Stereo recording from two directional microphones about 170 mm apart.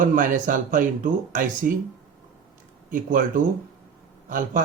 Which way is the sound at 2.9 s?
50° right (ahead or behind).